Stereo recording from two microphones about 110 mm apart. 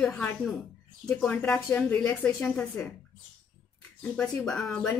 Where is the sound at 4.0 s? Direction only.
10° left (ahead or behind).